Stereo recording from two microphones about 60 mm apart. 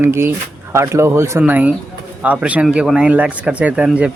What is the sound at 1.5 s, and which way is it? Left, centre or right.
Speech, right.